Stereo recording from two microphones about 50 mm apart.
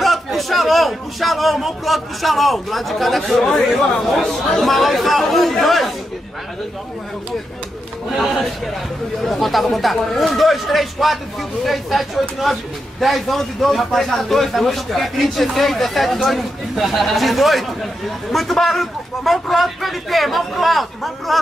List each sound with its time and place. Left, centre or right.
0.0 s a man's voice: centre
9.2 s a man's voice: centre